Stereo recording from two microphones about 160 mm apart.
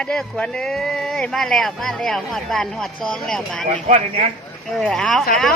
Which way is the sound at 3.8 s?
45° right (ahead or behind).